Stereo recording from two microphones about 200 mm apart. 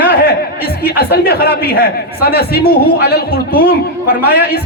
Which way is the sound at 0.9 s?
50° left (ahead or behind).